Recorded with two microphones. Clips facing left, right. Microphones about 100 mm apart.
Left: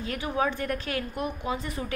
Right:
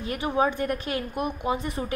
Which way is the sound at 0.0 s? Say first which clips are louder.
Right 3 dB; 20° right (ahead or behind).